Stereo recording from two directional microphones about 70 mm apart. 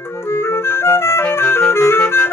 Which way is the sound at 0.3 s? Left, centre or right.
Left.